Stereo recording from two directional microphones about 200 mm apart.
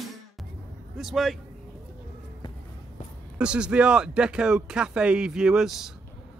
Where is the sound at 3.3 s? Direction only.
5° right (ahead or behind).